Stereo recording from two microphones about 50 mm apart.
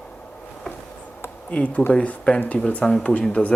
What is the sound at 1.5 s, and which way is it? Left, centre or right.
Speech, left.